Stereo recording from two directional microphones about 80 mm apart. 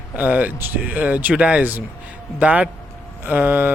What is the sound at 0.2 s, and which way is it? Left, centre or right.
Speech, right.